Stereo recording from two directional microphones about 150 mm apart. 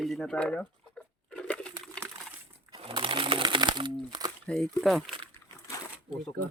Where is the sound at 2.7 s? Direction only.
35° right (ahead or behind).